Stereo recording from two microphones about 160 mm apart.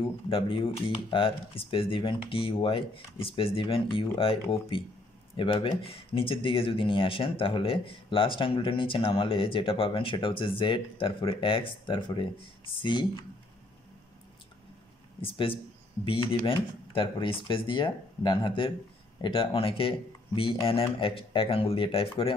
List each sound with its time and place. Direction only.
0.3 s speech: 35° left (ahead or behind)
15.2 s speech: 35° left (ahead or behind)